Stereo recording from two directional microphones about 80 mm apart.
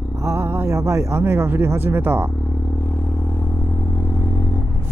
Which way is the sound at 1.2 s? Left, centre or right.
Right.